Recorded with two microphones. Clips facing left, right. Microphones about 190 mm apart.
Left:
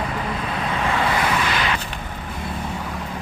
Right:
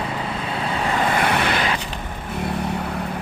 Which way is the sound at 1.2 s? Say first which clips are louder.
Right 2 dB; 60° right (ahead or behind).